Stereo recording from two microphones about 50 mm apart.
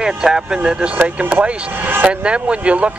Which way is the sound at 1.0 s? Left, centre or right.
Right.